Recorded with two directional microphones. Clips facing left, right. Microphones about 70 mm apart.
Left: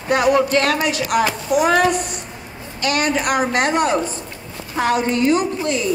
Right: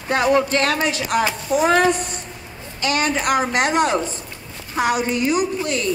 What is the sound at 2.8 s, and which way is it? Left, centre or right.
A woman's voice, right.